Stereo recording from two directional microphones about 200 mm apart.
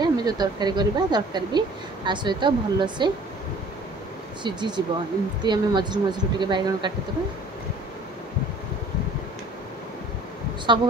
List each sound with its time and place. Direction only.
0.0 s speech: 20° right (ahead or behind)
4.4 s speech: 20° right (ahead or behind)
10.7 s speech: 25° right (ahead or behind)